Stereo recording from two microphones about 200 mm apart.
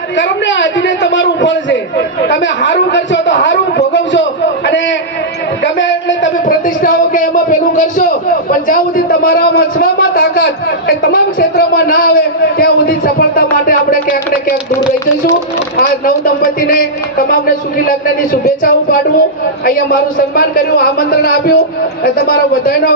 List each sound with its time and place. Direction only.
0.2 s a man's voice: 65° left (ahead or behind)
6.5 s speech: 45° left (ahead or behind)
15.8 s speech: 45° left (ahead or behind)